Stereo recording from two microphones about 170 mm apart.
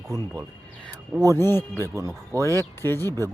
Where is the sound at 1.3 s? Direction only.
15° left (ahead or behind).